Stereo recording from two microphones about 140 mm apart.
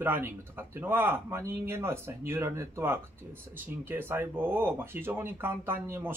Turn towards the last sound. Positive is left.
turn(degrees=-15)  # may be behind; listen again after turning